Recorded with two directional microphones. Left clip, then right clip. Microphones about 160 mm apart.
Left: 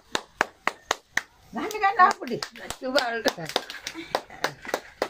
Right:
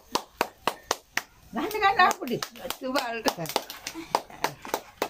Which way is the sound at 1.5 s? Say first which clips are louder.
Right 1 dB; 20° left (ahead or behind).